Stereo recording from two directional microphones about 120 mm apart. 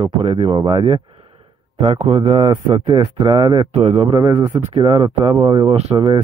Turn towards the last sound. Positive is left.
turn(degrees=-35)  # may be behind; listen again after turning